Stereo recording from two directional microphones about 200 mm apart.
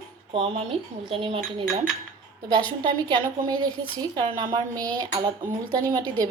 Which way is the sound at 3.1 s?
20° right (ahead or behind).